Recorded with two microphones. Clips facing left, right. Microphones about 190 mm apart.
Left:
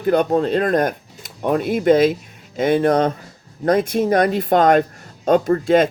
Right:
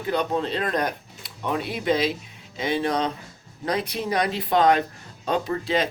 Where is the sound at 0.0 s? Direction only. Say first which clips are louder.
Left 8 dB; 50° left (ahead or behind).